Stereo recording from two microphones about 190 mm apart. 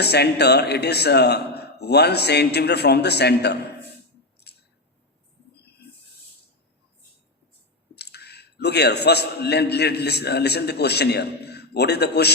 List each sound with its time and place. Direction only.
0.0 s a man's voice: 60° left (ahead or behind)
7.9 s a man's voice: 60° left (ahead or behind)